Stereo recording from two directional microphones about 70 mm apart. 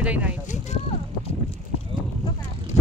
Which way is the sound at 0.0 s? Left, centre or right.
Centre.